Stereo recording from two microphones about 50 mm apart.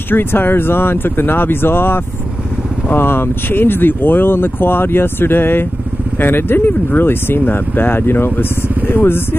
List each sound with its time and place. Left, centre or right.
0.1 s speech: left